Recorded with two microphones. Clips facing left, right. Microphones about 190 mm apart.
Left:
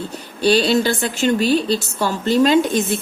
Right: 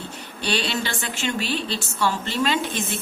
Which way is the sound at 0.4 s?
40° left (ahead or behind).